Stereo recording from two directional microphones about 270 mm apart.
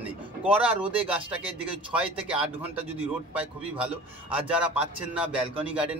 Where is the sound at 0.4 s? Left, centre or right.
Centre.